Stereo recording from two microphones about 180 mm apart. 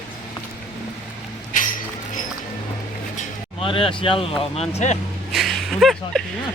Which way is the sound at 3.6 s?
30° left (ahead or behind).